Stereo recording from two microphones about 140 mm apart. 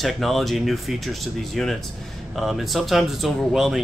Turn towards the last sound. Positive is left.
turn(degrees=-5)  # may be behind; listen again after turning